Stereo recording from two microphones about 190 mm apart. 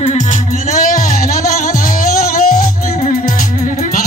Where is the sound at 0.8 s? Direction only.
45° left (ahead or behind).